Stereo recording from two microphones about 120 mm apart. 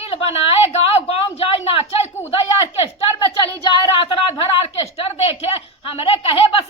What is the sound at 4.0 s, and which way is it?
A woman's voice, 50° left (ahead or behind).